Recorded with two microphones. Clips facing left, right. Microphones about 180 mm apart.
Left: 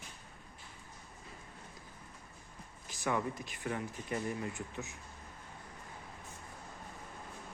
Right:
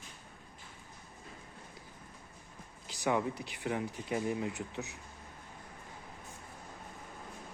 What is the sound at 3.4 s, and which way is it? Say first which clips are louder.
Speech: right 3 dB; 15° right (ahead or behind).